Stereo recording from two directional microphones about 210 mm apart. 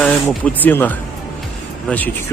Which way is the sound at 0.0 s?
10° left (ahead or behind).